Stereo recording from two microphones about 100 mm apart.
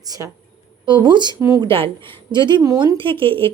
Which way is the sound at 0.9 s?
50° right (ahead or behind).